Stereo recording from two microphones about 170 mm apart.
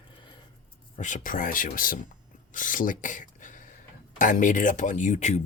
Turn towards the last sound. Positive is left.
turn(degrees=45)  # may be behind; listen again after turning